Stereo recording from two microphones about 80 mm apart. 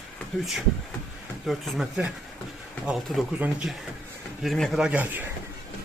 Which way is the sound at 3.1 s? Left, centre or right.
Centre.